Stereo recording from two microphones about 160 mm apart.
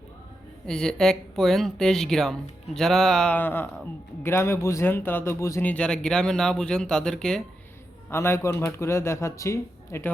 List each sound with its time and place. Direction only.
0.7 s speech: 5° left (ahead or behind)
8.1 s speech: 15° left (ahead or behind)